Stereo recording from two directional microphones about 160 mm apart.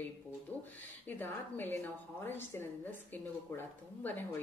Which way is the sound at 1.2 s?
10° left (ahead or behind).